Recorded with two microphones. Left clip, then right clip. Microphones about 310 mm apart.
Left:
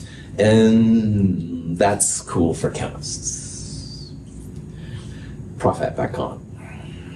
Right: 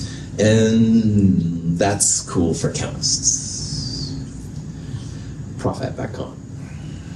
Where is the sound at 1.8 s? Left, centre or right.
Left.